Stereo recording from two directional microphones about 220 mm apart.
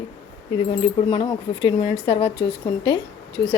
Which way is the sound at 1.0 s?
20° left (ahead or behind).